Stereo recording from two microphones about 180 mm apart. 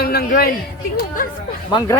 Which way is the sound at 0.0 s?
60° left (ahead or behind).